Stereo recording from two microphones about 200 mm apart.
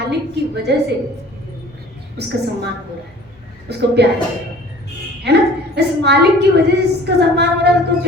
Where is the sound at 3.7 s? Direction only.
55° right (ahead or behind).